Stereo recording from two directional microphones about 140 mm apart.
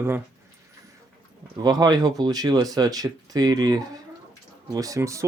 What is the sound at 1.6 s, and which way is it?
Speech, 30° right (ahead or behind).